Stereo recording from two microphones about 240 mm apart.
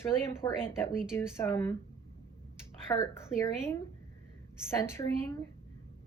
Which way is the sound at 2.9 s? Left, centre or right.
Centre.